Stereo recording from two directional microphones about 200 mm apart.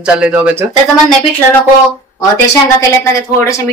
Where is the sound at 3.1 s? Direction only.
15° left (ahead or behind).